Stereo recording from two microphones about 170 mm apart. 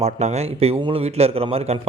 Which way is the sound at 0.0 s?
40° right (ahead or behind).